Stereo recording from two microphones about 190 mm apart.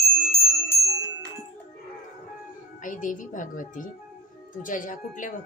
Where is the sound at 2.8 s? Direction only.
45° left (ahead or behind).